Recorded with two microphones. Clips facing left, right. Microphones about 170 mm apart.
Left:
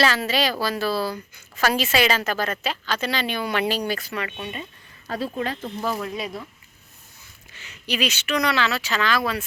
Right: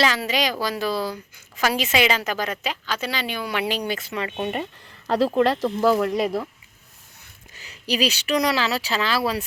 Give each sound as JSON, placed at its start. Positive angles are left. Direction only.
{"t": 0.0, "sound": "a woman's voice", "side_deg": -15}
{"t": 4.4, "sound": "speech", "side_deg": -50}
{"t": 5.0, "sound": "speech", "side_deg": -80}
{"t": 7.5, "sound": "speech", "side_deg": -35}